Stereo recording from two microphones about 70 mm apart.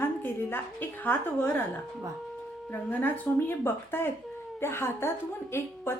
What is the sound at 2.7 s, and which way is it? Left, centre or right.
A woman's voice, left.